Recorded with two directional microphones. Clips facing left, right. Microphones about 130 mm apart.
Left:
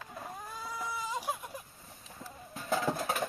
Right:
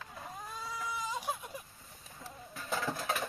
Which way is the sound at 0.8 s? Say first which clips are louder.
Left 2 dB; 10° left (ahead or behind).